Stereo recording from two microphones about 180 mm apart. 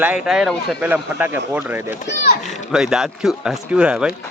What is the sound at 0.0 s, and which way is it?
A man's voice, 5° right (ahead or behind).